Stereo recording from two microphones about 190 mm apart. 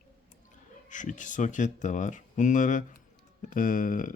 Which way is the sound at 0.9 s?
40° left (ahead or behind).